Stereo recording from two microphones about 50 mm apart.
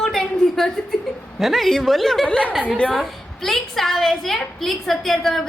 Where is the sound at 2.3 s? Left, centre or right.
Left.